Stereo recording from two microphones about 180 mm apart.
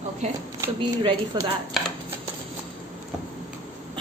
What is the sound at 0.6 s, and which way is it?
Speech, 25° right (ahead or behind).